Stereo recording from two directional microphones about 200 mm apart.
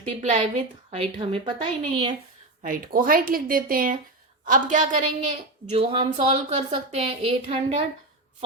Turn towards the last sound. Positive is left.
turn(degrees=-30)  # may be behind; listen again after turning